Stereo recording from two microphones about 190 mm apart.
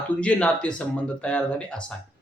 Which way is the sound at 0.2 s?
5° left (ahead or behind).